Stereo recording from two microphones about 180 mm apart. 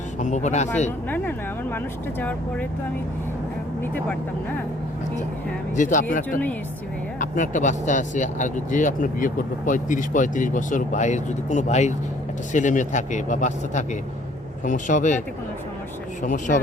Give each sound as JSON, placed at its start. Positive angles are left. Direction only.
{"t": 0.2, "sound": "speech", "side_deg": 40}
{"t": 1.1, "sound": "speech", "side_deg": 10}
{"t": 5.7, "sound": "speech", "side_deg": 45}
{"t": 16.2, "sound": "speech", "side_deg": 45}